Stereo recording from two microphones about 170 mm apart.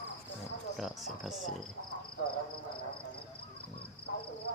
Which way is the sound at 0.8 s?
Centre (ahead or behind).